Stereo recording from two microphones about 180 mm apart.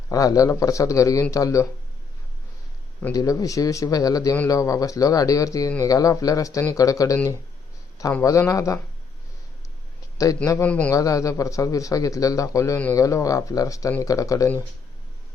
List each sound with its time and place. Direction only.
0.1 s speech: 20° left (ahead or behind)
3.0 s speech: 20° left (ahead or behind)
10.2 s speech: 20° left (ahead or behind)
10.9 s speech: 20° left (ahead or behind)